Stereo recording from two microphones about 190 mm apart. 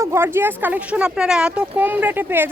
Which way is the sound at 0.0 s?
15° right (ahead or behind).